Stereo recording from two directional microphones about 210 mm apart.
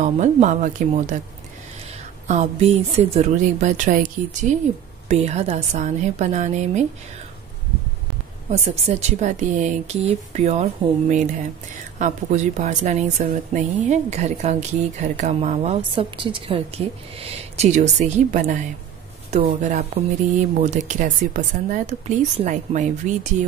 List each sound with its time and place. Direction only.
0.0 s speech: 35° right (ahead or behind)
2.2 s speech: 35° right (ahead or behind)
8.5 s speech: 30° right (ahead or behind)